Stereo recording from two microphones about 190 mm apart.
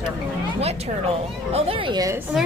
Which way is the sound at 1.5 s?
30° right (ahead or behind).